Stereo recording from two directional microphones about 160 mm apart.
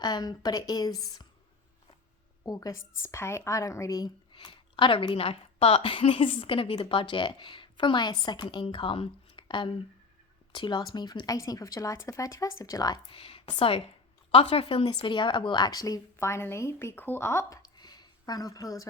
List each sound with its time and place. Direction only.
0.0 s a woman's voice: 25° left (ahead or behind)
2.4 s a woman's voice: 20° left (ahead or behind)